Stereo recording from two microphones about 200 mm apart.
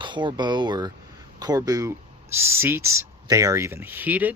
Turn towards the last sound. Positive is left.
turn(degrees=-10)  # may be behind; listen again after turning